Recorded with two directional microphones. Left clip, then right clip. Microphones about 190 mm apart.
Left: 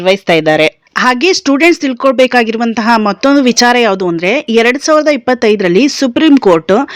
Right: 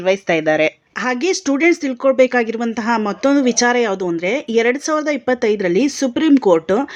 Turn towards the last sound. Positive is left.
turn(degrees=25)  # may be behind; listen again after turning